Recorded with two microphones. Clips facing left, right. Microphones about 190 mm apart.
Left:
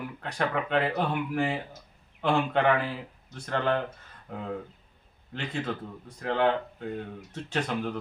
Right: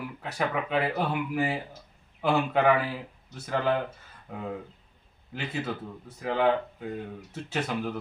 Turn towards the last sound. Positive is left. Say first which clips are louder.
# even
turn(degrees=-5)  # may be behind; listen again after turning